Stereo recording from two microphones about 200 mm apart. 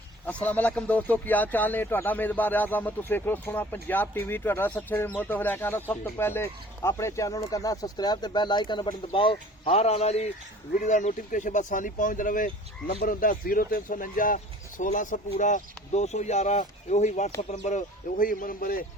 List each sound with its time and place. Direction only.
0.3 s speech: 10° left (ahead or behind); by 18.9 s 45° left (ahead or behind)